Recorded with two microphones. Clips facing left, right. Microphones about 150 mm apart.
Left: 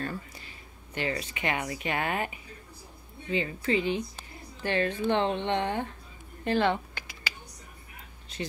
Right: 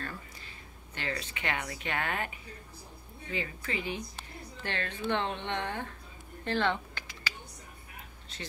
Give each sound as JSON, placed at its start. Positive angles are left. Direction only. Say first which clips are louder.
{"t": 0.9, "sound": "speech", "louder": "left 5 dB", "side_deg": 15}
{"t": 3.3, "sound": "speech", "louder": "left 8 dB", "side_deg": 25}
{"t": 4.6, "sound": "speech", "louder": "left 7 dB", "side_deg": 15}
{"t": 6.4, "sound": "a sound", "louder": "left 4 dB", "side_deg": 10}
{"t": 8.3, "sound": "speech", "louder": "left 8 dB", "side_deg": 15}